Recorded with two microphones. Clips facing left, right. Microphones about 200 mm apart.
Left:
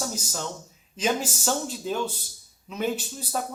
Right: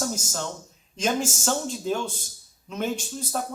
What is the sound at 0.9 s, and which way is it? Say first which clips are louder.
Speech: right 1 dB; 5° left (ahead or behind).